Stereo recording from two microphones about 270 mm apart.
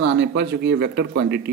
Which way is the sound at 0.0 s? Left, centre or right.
Right.